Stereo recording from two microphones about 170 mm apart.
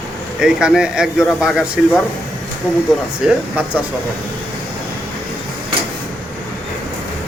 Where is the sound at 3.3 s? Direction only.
10° right (ahead or behind).